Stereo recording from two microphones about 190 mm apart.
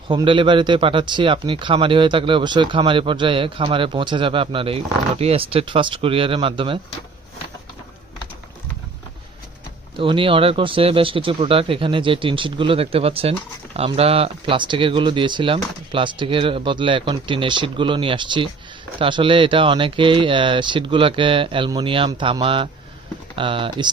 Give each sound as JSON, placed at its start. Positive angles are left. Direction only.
{"t": 0.1, "sound": "speech", "side_deg": -25}
{"t": 10.0, "sound": "speech", "side_deg": -25}